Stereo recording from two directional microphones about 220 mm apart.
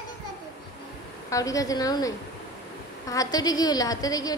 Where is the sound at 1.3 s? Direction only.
15° left (ahead or behind).